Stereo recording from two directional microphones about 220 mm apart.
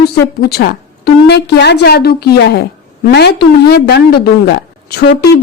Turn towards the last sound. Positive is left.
turn(degrees=45)  # may be behind; listen again after turning